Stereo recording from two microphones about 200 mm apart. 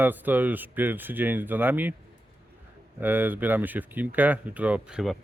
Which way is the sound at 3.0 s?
10° right (ahead or behind).